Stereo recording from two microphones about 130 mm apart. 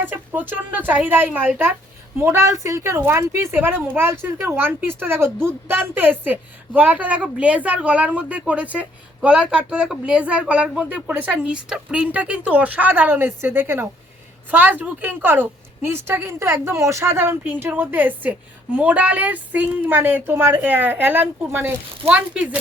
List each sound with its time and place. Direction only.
0.0 s a woman's voice: 15° right (ahead or behind)